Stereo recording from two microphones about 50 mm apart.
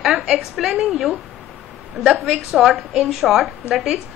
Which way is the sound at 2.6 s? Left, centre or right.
Centre.